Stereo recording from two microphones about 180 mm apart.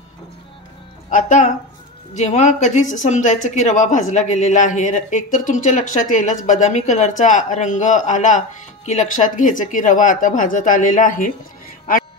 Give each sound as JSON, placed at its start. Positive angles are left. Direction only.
{"t": 1.1, "sound": "speech", "side_deg": 45}